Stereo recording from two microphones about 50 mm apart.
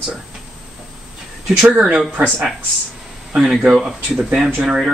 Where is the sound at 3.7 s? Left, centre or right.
Centre.